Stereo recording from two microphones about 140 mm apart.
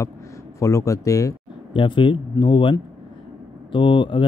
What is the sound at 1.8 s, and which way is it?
Speech, 35° left (ahead or behind).